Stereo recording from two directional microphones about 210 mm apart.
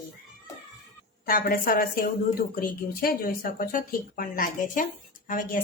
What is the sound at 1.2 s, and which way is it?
A woman's voice, 45° left (ahead or behind).